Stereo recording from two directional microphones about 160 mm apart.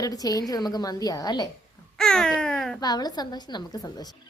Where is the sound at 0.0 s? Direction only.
25° left (ahead or behind).